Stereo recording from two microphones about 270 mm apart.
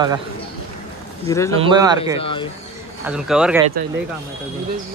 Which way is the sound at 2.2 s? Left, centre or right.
Centre.